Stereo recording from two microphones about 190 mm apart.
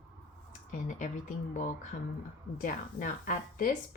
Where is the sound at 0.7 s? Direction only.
40° left (ahead or behind).